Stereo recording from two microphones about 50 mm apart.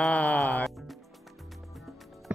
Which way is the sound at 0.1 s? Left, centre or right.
Left.